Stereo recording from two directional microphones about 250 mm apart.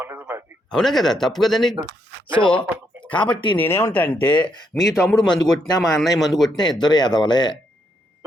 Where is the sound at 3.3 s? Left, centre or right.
Centre.